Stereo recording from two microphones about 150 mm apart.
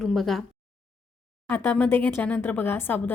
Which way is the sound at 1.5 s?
10° left (ahead or behind).